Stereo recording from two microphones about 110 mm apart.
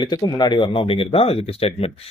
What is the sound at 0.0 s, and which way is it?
Speech, 40° left (ahead or behind).